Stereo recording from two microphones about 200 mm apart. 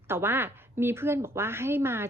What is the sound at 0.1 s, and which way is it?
Speech, 10° right (ahead or behind).